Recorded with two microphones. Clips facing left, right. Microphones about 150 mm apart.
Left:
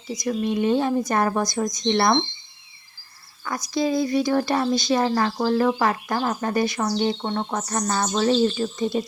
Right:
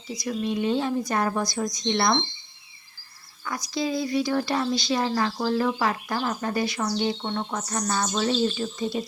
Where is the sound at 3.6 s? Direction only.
50° left (ahead or behind).